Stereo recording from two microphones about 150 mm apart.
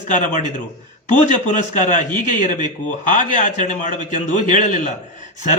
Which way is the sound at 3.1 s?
55° left (ahead or behind).